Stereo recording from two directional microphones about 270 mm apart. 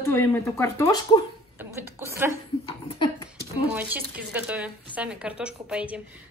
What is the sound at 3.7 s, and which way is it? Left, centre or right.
A woman's voice, centre.